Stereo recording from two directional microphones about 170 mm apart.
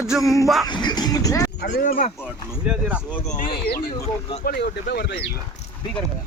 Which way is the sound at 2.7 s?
10° right (ahead or behind).